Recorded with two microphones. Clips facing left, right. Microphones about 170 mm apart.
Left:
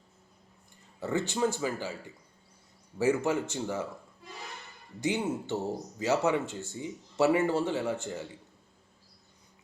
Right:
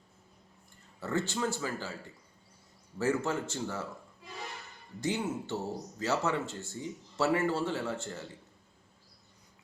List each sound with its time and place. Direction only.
0.9 s speech: 15° left (ahead or behind)
3.0 s speech: 15° left (ahead or behind)
4.9 s speech: 15° left (ahead or behind)